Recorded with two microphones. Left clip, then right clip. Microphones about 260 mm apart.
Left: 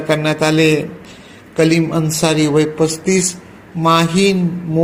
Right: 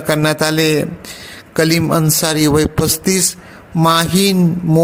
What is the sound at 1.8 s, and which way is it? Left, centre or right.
A man's voice, right.